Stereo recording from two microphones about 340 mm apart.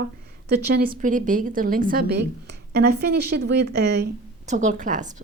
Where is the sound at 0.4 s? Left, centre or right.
Right.